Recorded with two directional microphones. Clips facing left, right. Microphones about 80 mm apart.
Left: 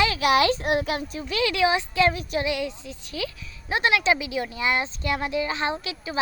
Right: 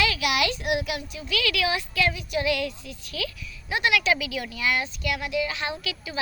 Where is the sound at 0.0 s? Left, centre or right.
Left.